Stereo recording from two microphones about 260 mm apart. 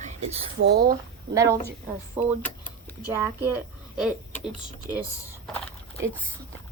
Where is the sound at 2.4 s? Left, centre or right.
Centre.